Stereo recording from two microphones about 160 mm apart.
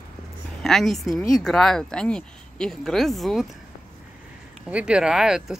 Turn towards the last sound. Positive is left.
turn(degrees=-5)  # may be behind; listen again after turning